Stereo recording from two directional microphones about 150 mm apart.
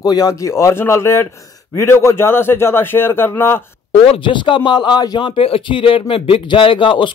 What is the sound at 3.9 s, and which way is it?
Speech, 35° left (ahead or behind).